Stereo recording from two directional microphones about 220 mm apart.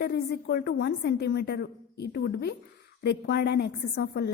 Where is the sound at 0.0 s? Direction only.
50° left (ahead or behind).